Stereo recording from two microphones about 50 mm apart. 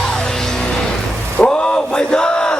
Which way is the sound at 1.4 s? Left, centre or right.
Left.